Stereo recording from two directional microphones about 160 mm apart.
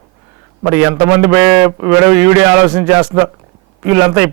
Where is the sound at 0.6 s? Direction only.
10° right (ahead or behind).